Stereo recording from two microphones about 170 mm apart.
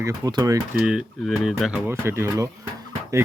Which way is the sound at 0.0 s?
20° right (ahead or behind).